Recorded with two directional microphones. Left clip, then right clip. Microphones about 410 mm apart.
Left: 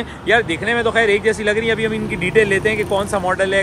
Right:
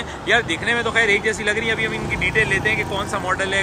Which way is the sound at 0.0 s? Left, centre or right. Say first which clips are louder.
Left 3 dB; centre.